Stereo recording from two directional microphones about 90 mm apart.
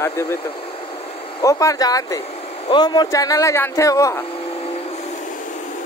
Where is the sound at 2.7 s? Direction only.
55° left (ahead or behind).